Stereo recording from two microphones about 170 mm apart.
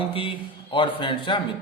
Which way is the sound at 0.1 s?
30° left (ahead or behind).